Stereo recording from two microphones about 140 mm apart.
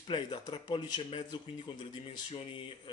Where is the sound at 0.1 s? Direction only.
35° left (ahead or behind).